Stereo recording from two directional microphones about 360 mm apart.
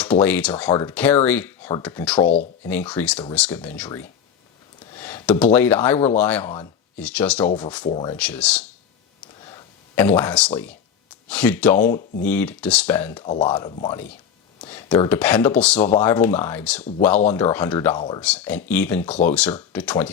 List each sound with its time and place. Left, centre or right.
0.0 s speech: centre
9.2 s a sound: centre
12.2 s speech: centre
13.2 s speech: centre